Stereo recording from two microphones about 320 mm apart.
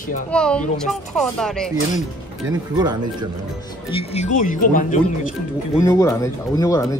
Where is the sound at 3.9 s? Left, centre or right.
Centre.